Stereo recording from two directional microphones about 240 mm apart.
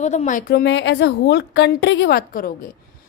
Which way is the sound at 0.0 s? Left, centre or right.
Left.